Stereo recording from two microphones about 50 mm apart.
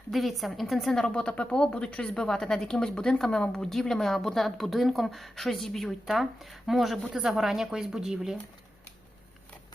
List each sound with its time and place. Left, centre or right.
0.1 s speech: centre
0.9 s a woman's voice: centre
2.1 s a woman's voice: centre